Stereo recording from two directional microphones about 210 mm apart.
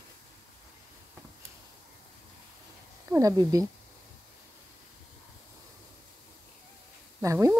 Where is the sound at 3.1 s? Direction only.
15° right (ahead or behind).